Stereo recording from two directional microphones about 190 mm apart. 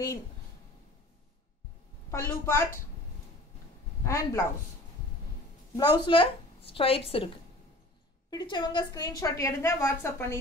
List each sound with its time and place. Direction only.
2.0 s a woman's voice: 15° left (ahead or behind)
4.0 s a woman's voice: 15° left (ahead or behind)
5.8 s a woman's voice: 20° left (ahead or behind)
8.3 s a woman's voice: 25° left (ahead or behind)